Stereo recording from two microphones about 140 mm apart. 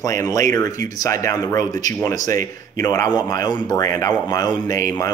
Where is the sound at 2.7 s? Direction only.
25° left (ahead or behind).